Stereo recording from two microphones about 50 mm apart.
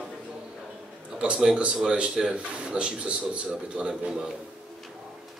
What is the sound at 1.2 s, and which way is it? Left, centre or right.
Speech, right.